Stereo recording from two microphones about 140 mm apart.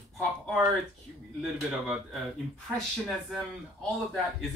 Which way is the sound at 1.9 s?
Centre (ahead or behind).